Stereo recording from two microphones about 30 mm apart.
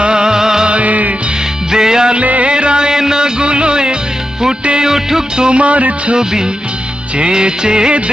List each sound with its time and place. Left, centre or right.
0.0 s music: right
0.7 s music: right
1.7 s music: right
2.2 s music: right
2.5 s music: right
4.8 s music: centre
5.4 s music: right
6.1 s music: right